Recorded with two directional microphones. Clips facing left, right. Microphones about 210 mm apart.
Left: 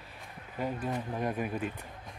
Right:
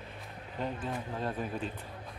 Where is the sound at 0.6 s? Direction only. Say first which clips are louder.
Left 3 dB; 10° left (ahead or behind).